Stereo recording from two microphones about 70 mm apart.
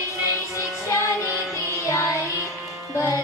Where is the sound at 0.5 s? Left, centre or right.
Left.